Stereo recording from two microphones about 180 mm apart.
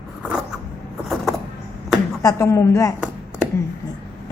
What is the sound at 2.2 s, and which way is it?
Speech, 15° left (ahead or behind).